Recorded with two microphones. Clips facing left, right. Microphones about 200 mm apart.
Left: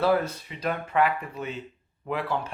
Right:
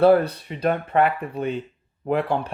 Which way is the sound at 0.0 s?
60° right (ahead or behind).